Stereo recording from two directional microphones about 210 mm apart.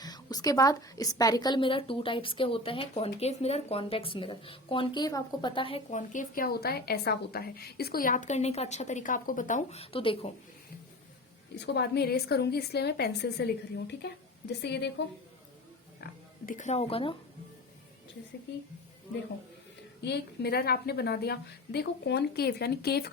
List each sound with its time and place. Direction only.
0.0 s a woman's voice: 20° left (ahead or behind)
11.6 s a woman's voice: 50° left (ahead or behind)
16.5 s a woman's voice: 35° left (ahead or behind)
20.1 s a woman's voice: 50° left (ahead or behind)